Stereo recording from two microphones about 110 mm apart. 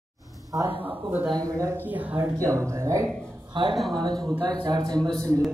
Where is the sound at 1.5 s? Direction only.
25° right (ahead or behind).